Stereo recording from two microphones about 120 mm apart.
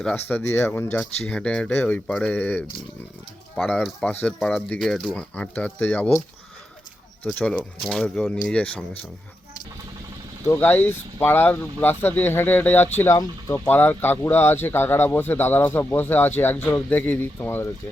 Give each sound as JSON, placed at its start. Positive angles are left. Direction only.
{"t": 0.0, "sound": "speech", "side_deg": 10}
{"t": 3.7, "sound": "speech", "side_deg": 10}
{"t": 7.9, "sound": "speech", "side_deg": 5}
{"t": 10.4, "sound": "speech", "side_deg": 15}